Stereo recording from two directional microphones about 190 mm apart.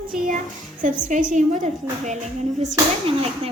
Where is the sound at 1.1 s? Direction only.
40° right (ahead or behind).